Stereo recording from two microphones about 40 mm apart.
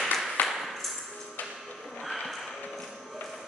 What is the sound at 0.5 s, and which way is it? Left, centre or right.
Ping, centre.